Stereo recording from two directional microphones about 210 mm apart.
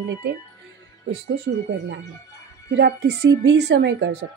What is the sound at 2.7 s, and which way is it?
Speech, 55° right (ahead or behind).